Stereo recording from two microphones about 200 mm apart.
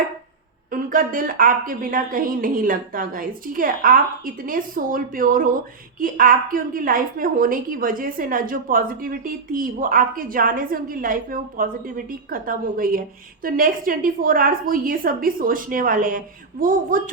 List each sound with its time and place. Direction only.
0.7 s a woman's voice: 45° right (ahead or behind)